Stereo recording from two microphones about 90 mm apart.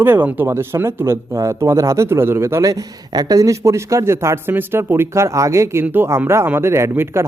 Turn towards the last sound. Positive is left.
turn(degrees=-30)  # may be behind; listen again after turning